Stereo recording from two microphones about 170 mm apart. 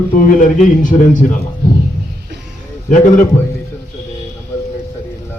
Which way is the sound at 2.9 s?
45° left (ahead or behind).